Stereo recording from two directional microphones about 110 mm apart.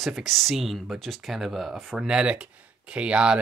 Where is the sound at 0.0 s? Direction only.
Centre (ahead or behind).